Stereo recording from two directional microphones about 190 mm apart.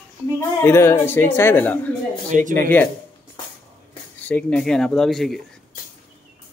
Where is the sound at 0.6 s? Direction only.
15° left (ahead or behind).